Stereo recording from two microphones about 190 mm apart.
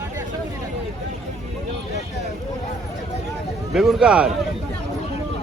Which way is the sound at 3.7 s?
Centre (ahead or behind).